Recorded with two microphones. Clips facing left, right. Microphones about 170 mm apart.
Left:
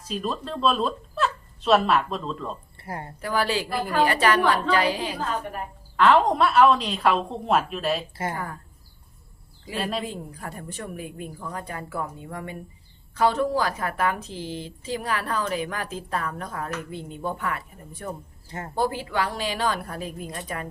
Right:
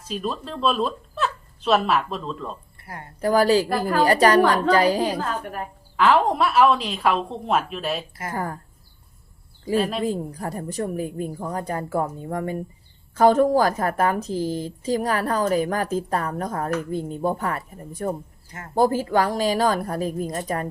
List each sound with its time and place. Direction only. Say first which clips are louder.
0.0 s speech: right 1 dB; centre (ahead or behind)
2.7 s a woman's voice: left 4 dB; 25° left (ahead or behind)
3.2 s a woman's voice: right 8 dB; 40° right (ahead or behind)
6.0 s a woman's voice: even; 5° right (ahead or behind)
8.3 s a woman's voice: right 8 dB; 40° right (ahead or behind)
9.7 s a woman's voice: right 6 dB; centre (ahead or behind)
10.0 s a woman's voice: right 8 dB; 40° right (ahead or behind)
18.4 s speech: left 4 dB; 30° left (ahead or behind)
18.7 s a woman's voice: right 7 dB; 40° right (ahead or behind)